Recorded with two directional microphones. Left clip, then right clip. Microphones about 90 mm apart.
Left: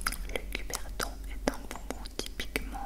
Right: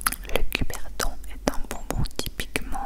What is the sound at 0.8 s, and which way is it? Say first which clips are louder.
Whispering: right 6 dB; 15° right (ahead or behind).